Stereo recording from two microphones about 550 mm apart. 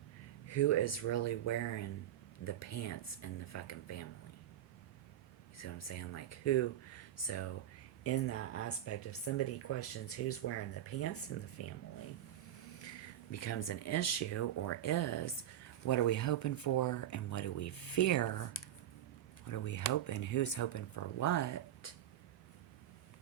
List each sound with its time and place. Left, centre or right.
0.4 s speech: left
5.5 s speech: left
13.3 s speech: left
19.5 s speech: left